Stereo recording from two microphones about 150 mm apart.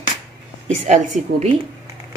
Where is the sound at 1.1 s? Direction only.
55° right (ahead or behind).